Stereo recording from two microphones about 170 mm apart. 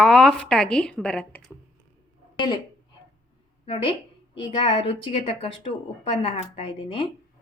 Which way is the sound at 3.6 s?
30° left (ahead or behind).